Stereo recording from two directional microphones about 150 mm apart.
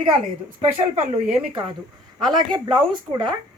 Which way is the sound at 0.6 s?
50° right (ahead or behind).